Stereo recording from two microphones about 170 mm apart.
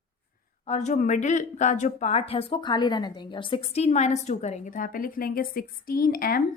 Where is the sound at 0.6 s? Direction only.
40° left (ahead or behind); by 6.4 s 60° left (ahead or behind).